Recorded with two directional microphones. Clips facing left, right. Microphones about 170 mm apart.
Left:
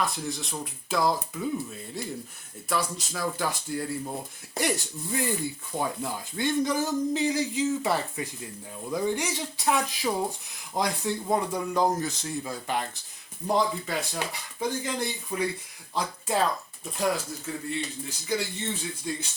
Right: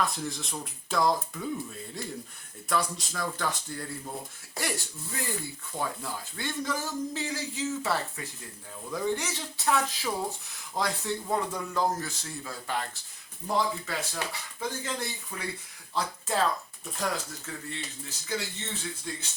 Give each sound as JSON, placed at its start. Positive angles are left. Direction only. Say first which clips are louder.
{"t": 0.0, "sound": "speech", "louder": "left 1 dB", "side_deg": 0}
{"t": 2.6, "sound": "speech", "louder": "even", "side_deg": 5}